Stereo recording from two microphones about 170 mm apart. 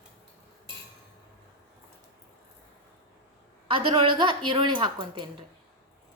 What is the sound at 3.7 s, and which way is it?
Speech, 30° right (ahead or behind).